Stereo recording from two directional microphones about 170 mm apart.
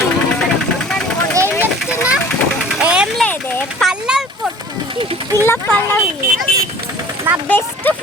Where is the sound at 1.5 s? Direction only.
15° left (ahead or behind).